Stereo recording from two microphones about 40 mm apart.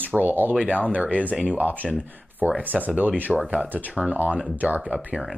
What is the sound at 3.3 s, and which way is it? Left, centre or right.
Speech, right.